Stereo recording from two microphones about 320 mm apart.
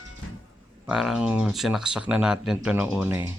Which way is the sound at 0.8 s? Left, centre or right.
Centre.